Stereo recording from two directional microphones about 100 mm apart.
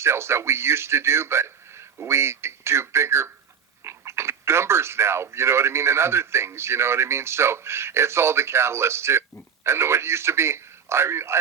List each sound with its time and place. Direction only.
0.0 s speech: 25° right (ahead or behind)